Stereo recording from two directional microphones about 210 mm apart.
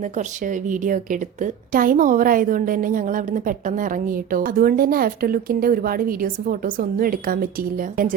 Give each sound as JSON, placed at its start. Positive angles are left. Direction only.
{"t": 0.2, "sound": "a woman's voice", "side_deg": -40}